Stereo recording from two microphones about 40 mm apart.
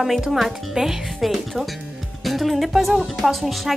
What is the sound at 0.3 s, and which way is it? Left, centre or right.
A woman's voice, centre.